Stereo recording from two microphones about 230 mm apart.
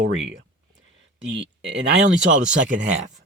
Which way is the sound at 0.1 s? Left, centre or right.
Right.